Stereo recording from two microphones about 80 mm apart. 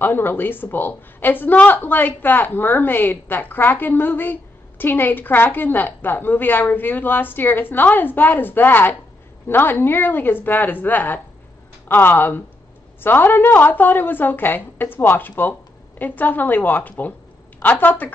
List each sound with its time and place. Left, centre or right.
0.0 s a woman's voice: left